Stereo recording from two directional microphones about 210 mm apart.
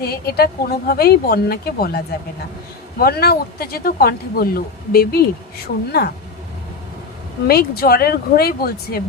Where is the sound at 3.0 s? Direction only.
50° left (ahead or behind).